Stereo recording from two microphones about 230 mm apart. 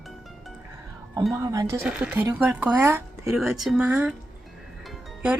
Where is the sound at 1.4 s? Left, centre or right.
Centre.